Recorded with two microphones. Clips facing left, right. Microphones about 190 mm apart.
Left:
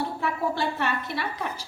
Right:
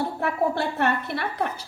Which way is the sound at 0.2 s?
55° right (ahead or behind).